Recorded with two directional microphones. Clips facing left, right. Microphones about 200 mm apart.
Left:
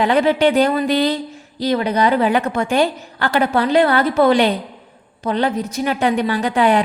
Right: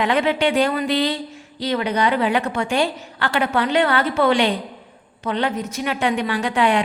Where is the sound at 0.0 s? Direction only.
35° left (ahead or behind).